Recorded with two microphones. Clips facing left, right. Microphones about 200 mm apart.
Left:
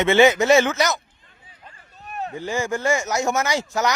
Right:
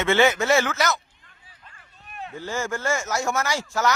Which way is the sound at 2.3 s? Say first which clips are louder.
Left 3 dB; 15° left (ahead or behind).